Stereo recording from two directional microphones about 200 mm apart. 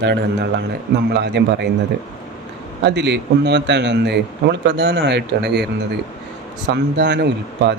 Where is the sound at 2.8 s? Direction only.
60° right (ahead or behind).